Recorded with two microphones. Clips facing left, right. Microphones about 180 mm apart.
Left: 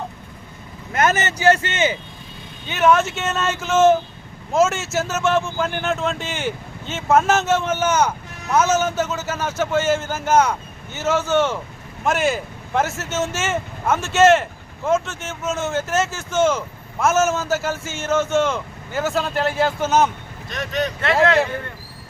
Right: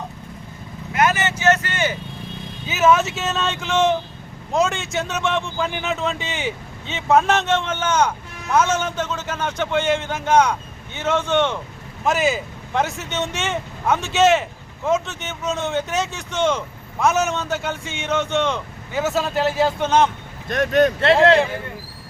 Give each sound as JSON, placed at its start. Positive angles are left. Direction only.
{"t": 0.9, "sound": "speech", "side_deg": 45}
{"t": 2.6, "sound": "a man's voice", "side_deg": -5}
{"t": 20.5, "sound": "speech", "side_deg": -50}